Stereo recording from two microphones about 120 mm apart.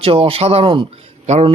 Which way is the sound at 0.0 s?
50° right (ahead or behind).